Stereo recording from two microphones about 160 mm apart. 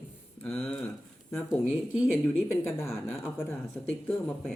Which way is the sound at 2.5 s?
15° left (ahead or behind).